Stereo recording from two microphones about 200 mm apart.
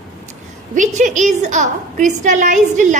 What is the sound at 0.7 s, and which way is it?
A woman's voice, 40° right (ahead or behind).